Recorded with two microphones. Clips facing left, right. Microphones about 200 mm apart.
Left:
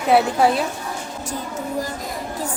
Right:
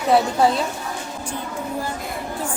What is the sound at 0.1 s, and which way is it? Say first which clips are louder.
Speech: left 1 dB; 5° left (ahead or behind).